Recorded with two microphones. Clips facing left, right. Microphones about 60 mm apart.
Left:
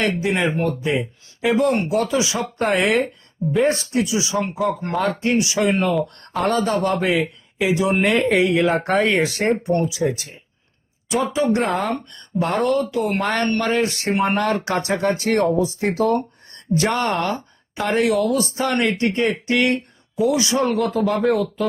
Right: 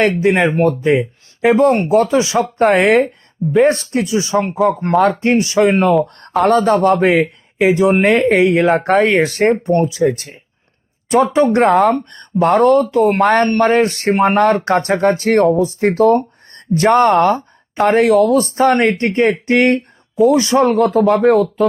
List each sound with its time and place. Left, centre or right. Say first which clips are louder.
0.2 s speech: right 7 dB; right
11.9 s speech: right 7 dB; right